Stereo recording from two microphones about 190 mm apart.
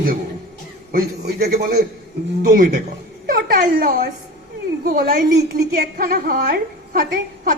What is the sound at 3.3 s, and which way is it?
A woman's voice, 50° right (ahead or behind).